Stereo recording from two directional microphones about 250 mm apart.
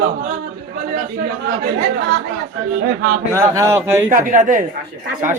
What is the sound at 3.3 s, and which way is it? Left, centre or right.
Speech, centre.